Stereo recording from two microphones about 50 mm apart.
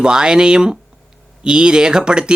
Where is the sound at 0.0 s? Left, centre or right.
Centre.